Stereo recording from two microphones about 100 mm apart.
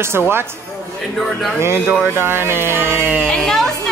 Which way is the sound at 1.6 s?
25° right (ahead or behind).